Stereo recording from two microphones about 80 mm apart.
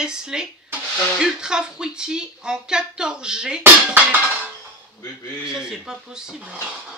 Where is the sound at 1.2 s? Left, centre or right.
Centre.